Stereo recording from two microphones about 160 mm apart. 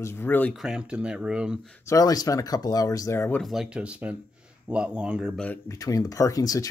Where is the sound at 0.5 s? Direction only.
5° right (ahead or behind).